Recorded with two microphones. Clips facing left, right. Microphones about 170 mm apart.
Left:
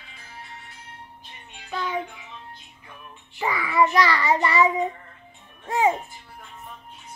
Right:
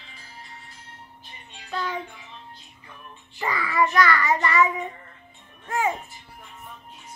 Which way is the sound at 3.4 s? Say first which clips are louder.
Left 1 dB; 10° left (ahead or behind).